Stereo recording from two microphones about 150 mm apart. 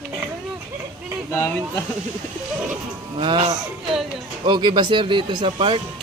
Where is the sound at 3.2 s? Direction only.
35° right (ahead or behind).